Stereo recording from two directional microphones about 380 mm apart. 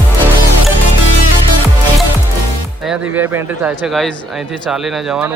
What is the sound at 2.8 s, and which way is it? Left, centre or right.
Speech, centre.